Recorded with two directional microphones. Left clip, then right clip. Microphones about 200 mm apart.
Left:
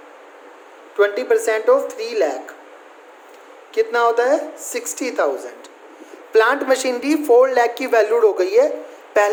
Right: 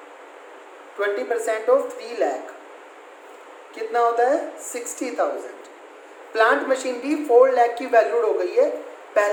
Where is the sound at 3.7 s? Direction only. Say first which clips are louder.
Left 4 dB; 50° left (ahead or behind).